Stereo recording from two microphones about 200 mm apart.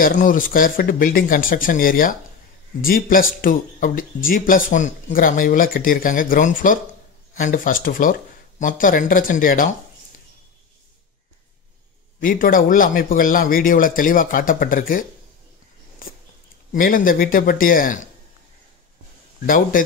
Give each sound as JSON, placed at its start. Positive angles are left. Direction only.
{"t": 0.0, "sound": "speech", "side_deg": 40}
{"t": 12.2, "sound": "speech", "side_deg": 45}
{"t": 16.7, "sound": "speech", "side_deg": 45}
{"t": 19.4, "sound": "speech", "side_deg": 45}